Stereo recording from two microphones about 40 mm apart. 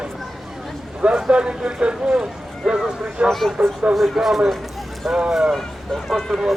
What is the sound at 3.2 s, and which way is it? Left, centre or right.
Speech, centre.